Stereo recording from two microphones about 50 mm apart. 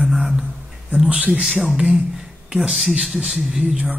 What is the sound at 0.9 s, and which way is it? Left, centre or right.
Speech, centre.